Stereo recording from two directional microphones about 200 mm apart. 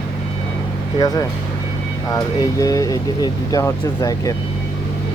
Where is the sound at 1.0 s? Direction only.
20° left (ahead or behind).